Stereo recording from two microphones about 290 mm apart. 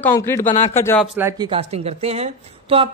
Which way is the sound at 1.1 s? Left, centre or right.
Centre.